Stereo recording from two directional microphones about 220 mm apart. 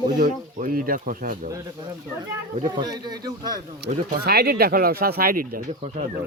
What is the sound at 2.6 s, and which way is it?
A man's voice, 20° right (ahead or behind).